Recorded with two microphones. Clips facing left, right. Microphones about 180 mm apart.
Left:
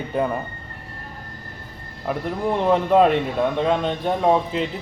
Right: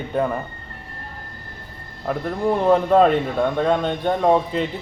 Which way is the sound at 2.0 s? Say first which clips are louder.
Right 2 dB; centre (ahead or behind).